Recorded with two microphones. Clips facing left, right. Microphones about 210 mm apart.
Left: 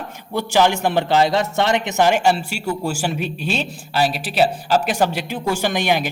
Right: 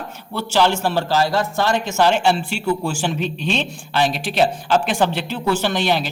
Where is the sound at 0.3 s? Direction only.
15° left (ahead or behind).